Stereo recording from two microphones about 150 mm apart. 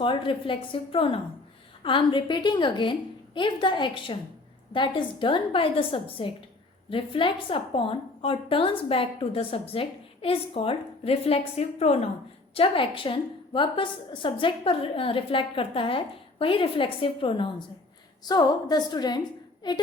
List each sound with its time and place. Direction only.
0.0 s a woman's voice: 35° left (ahead or behind)